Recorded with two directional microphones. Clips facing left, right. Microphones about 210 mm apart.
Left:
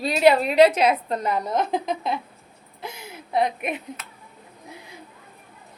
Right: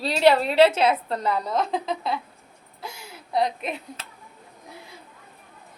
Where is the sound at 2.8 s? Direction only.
20° left (ahead or behind).